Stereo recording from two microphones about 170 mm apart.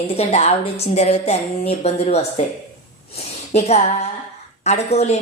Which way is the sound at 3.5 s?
40° left (ahead or behind).